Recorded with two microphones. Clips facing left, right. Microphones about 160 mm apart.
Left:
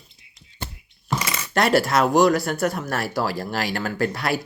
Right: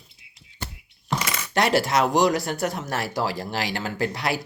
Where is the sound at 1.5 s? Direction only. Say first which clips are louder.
Left 2 dB; 20° right (ahead or behind).